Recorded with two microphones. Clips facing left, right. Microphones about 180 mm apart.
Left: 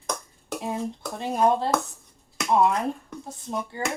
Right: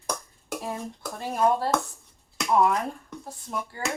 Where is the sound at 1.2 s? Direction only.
20° left (ahead or behind).